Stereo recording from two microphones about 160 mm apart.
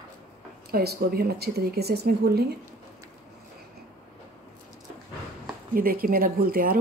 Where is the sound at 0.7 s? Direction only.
80° right.